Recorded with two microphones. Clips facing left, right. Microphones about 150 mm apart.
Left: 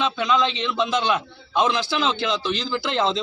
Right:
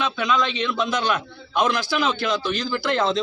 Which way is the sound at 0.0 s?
25° left (ahead or behind).